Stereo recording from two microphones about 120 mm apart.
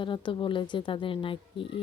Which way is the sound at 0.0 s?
40° left (ahead or behind).